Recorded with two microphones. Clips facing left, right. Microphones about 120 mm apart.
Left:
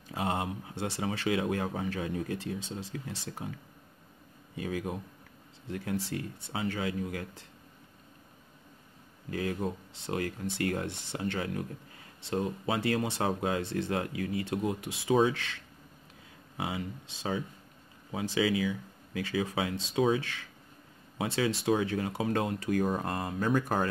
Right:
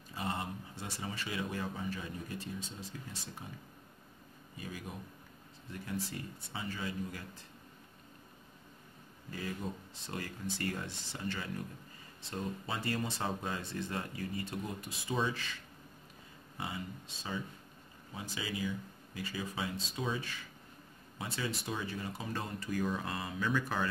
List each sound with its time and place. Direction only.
0.1 s speech: 85° left
4.6 s speech: 90° left; by 7.4 s 70° left (ahead or behind)
9.3 s speech: 60° left (ahead or behind)
18.1 s speech: 90° left; by 23.9 s 45° left (ahead or behind)